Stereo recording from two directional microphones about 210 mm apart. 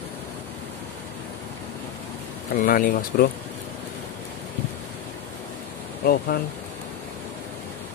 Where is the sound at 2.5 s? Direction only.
45° left (ahead or behind).